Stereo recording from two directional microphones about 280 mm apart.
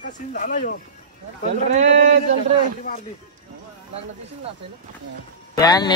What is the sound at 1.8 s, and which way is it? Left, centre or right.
Speech, right.